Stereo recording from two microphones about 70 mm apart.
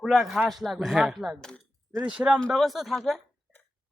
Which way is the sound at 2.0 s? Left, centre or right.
Centre.